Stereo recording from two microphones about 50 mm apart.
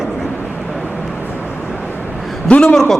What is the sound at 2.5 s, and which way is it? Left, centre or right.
Speech, left.